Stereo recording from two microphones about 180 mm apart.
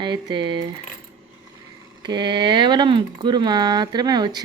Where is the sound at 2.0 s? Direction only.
25° right (ahead or behind).